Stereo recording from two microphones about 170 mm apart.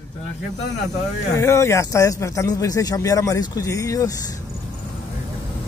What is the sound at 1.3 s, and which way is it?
Speech, 15° left (ahead or behind).